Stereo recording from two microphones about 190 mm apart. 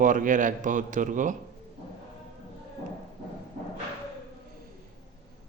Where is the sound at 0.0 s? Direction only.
45° right (ahead or behind).